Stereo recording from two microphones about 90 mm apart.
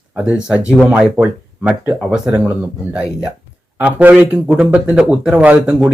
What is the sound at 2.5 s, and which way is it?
Speech, 10° right (ahead or behind).